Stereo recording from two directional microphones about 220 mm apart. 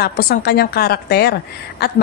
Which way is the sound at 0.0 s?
45° left (ahead or behind).